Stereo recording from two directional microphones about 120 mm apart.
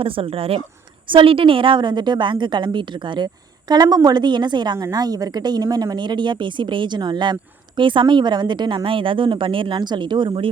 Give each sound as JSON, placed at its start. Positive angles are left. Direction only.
{"t": 0.0, "sound": "a woman's voice", "side_deg": -50}